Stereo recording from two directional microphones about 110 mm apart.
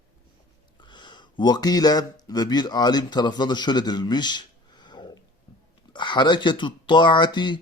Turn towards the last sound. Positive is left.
turn(degrees=45)  # may be behind; listen again after turning